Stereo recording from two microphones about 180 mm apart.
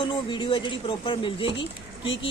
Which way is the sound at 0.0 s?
25° left (ahead or behind).